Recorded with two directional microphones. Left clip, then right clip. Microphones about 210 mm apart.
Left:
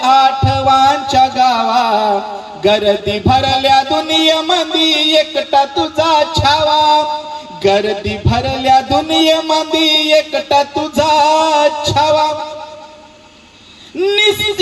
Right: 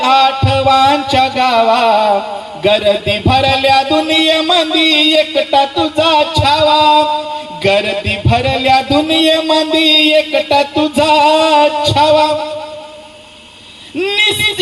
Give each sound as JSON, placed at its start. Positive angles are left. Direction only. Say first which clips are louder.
{"t": 0.0, "sound": "music", "louder": "even", "side_deg": -30}